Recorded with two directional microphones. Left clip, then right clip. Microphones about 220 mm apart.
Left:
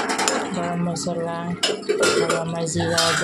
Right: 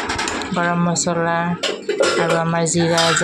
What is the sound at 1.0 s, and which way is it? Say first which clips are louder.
Speech: right 9 dB; 20° right (ahead or behind).